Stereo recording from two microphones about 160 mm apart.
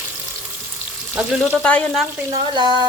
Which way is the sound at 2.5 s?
25° right (ahead or behind).